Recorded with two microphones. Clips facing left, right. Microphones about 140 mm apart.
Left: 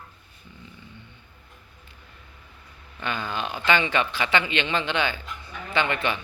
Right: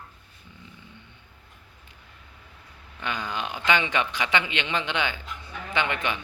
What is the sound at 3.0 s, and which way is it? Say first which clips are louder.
Speech: left 1 dB; 15° right (ahead or behind).